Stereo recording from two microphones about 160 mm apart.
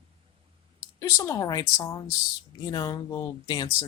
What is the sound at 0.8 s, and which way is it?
Speech, 15° left (ahead or behind).